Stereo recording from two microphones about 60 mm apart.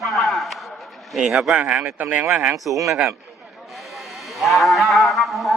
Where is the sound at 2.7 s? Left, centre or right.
Right.